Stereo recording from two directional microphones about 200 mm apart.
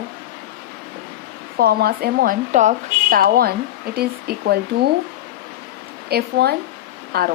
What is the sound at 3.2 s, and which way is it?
Speech, 50° right (ahead or behind).